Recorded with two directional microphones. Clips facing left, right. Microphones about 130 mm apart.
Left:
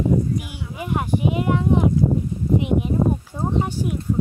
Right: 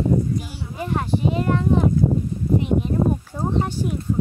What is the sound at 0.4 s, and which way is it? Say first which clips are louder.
Speech: right 1 dB; 15° left (ahead or behind).